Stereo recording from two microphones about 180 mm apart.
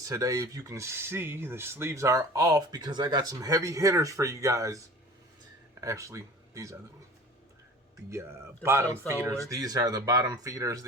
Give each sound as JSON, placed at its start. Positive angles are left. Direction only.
{"t": 0.0, "sound": "speech", "side_deg": -20}
{"t": 5.8, "sound": "speech", "side_deg": -15}
{"t": 8.6, "sound": "speech", "side_deg": -15}